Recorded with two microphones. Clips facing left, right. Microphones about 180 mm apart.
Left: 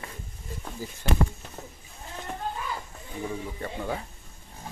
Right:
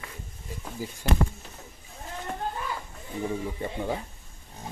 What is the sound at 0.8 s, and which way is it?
Speech, 10° right (ahead or behind).